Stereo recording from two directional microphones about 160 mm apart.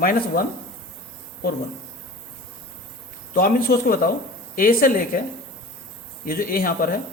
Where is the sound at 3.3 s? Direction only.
65° left (ahead or behind).